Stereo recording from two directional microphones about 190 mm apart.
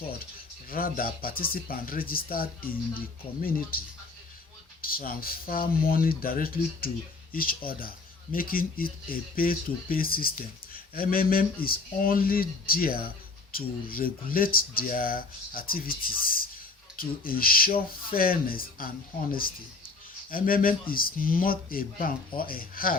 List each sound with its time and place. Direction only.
0.7 s speech: 50° left (ahead or behind)